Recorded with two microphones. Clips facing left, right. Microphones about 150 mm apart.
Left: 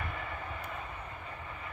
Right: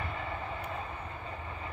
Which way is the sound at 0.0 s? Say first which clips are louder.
Right 2 dB; 25° right (ahead or behind).